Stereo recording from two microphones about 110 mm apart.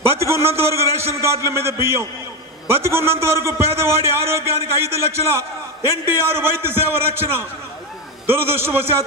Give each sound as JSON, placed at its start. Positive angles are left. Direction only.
{"t": 0.1, "sound": "a man's voice", "side_deg": -25}
{"t": 8.3, "sound": "a man's voice", "side_deg": -20}